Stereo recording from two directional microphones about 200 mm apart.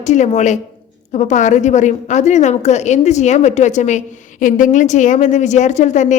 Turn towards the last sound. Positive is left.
turn(degrees=35)  # may be behind; listen again after turning